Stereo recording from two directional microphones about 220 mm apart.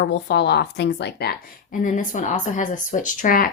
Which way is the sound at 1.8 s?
35° left (ahead or behind).